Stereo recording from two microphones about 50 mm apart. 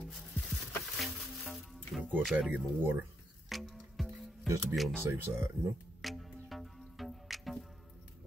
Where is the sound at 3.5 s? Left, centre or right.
Centre.